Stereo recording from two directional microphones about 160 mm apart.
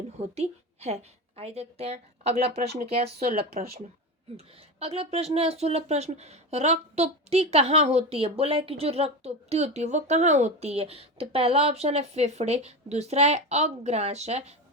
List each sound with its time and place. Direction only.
0.3 s speech: 40° right (ahead or behind)
3.6 s speech: 70° right (ahead or behind)
4.4 s speech: 40° right (ahead or behind)